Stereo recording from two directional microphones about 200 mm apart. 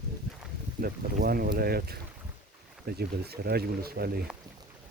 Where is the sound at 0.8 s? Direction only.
50° right (ahead or behind).